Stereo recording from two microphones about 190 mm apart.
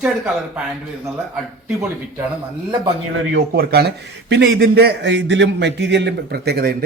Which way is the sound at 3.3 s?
60° right (ahead or behind).